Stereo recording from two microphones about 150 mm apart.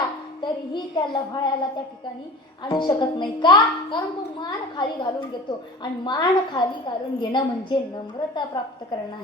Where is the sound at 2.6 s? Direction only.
30° left (ahead or behind).